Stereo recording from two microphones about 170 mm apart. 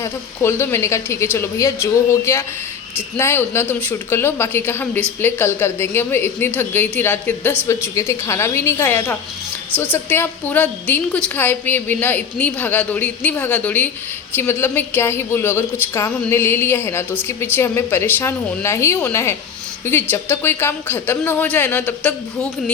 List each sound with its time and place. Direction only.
0.0 s a woman's voice: 15° left (ahead or behind)